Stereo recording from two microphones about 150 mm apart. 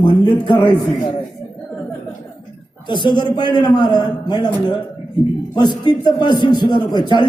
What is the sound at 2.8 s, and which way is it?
A man's voice, 30° left (ahead or behind).